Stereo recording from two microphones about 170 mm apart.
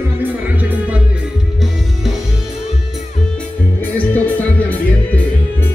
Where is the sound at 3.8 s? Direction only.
10° left (ahead or behind).